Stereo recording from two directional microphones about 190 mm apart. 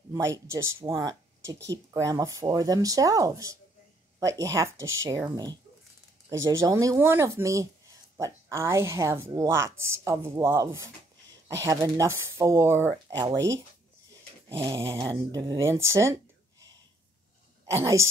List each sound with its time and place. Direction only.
0.1 s speech: 15° right (ahead or behind)
14.6 s speech: 15° right (ahead or behind)
17.6 s speech: 15° right (ahead or behind)